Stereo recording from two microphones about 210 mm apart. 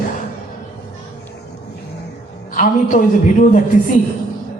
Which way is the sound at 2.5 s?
40° left (ahead or behind).